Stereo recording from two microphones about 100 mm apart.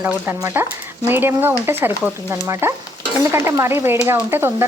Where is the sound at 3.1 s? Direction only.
25° right (ahead or behind).